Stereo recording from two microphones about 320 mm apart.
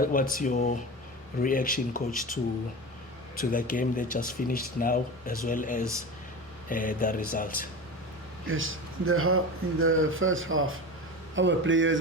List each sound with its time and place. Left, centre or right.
0.0 s speech: left
8.4 s speech: right